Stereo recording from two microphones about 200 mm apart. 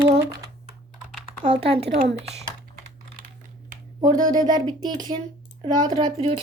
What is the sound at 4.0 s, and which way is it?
Speech, 20° right (ahead or behind).